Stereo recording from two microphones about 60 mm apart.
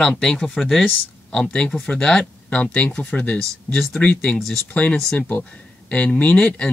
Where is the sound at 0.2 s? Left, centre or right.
Centre.